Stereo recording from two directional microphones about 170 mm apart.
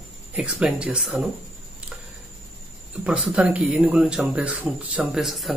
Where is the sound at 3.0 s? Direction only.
5° right (ahead or behind).